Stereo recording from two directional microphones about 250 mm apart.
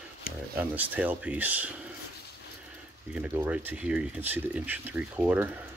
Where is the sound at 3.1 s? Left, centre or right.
Centre.